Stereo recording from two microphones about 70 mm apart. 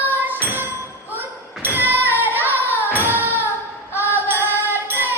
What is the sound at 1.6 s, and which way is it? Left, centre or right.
Music, right.